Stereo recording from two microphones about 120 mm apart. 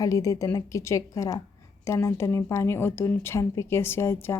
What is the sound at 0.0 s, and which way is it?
Speech, 30° left (ahead or behind).